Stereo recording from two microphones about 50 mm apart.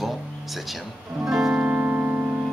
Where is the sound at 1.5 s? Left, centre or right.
Right.